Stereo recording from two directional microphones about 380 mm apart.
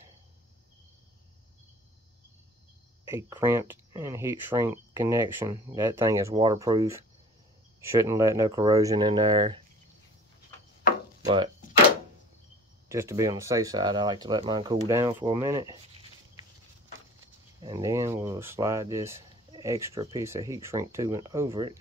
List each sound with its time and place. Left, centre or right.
3.1 s speech: centre
12.8 s speech: centre
17.6 s speech: centre